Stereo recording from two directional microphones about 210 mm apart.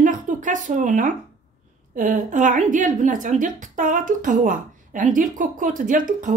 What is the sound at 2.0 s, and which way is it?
A woman's voice, 40° right (ahead or behind).